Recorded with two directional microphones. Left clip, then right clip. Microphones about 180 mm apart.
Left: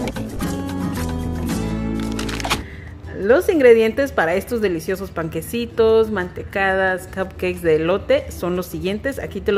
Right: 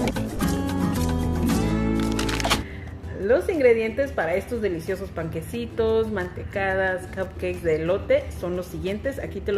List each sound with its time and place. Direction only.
0.0 s music: centre (ahead or behind)
3.3 s a woman's voice: 40° left (ahead or behind)